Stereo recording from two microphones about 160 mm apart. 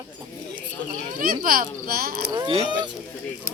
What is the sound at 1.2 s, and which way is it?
A child's voice, 65° right (ahead or behind).